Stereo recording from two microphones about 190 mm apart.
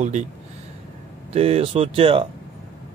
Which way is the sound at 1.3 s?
30° right (ahead or behind).